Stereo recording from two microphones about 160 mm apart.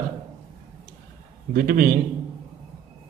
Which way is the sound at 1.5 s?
70° right (ahead or behind).